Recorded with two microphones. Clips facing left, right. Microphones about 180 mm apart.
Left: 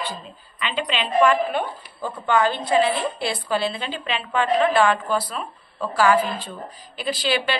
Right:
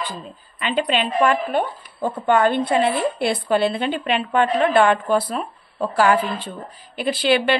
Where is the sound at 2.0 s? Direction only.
55° right (ahead or behind).